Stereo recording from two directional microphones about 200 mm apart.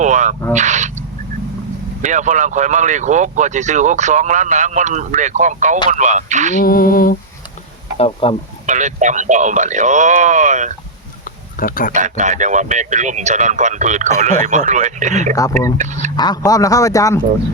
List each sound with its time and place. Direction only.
0.0 s speech: 35° right (ahead or behind)
2.0 s speech: 35° right (ahead or behind)
6.6 s lullaby: 45° left (ahead or behind)
7.9 s speech: 30° left (ahead or behind)
8.6 s speech: 40° right (ahead or behind)
11.6 s lullaby: 45° left (ahead or behind)
11.9 s speech: 35° right (ahead or behind)
16.1 s a man's voice: 20° left (ahead or behind)